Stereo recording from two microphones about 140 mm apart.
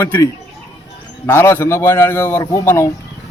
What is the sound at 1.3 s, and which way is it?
A man's voice, 20° left (ahead or behind).